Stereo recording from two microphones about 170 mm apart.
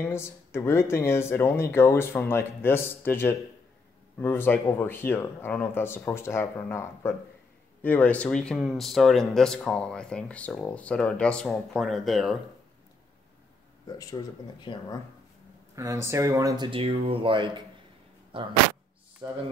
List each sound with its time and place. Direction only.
0.0 s speech: 15° left (ahead or behind)
13.8 s speech: 25° left (ahead or behind)
15.7 s speech: 15° right (ahead or behind)
19.2 s speech: 20° right (ahead or behind)